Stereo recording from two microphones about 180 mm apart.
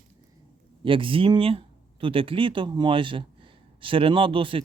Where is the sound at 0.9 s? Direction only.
30° right (ahead or behind).